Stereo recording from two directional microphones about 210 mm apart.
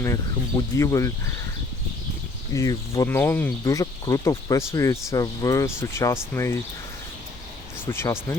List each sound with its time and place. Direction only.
0.0 s speech: 15° left (ahead or behind)
2.5 s speech: 15° left (ahead or behind)
7.9 s speech: 10° left (ahead or behind)